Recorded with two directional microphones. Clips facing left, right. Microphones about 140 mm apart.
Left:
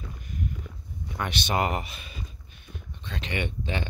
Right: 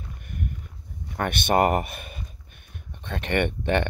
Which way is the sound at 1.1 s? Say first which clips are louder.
Right 6 dB; 55° right (ahead or behind).